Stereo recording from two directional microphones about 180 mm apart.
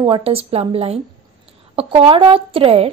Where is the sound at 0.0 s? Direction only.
30° right (ahead or behind).